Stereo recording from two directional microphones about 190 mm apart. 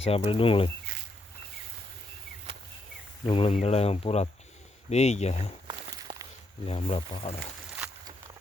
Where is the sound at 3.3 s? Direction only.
30° left (ahead or behind).